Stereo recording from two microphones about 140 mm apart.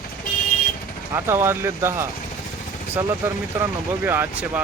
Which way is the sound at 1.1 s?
20° right (ahead or behind).